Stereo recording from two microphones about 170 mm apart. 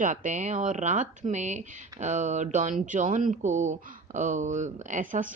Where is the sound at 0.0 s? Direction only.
45° right (ahead or behind).